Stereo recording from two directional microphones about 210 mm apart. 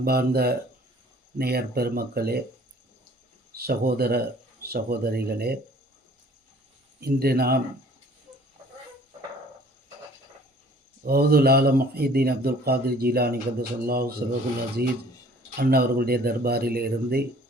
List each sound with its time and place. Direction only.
0.0 s speech: 45° right (ahead or behind)
3.5 s speech: 45° right (ahead or behind)
7.0 s speech: 45° right (ahead or behind)
11.0 s speech: 45° right (ahead or behind)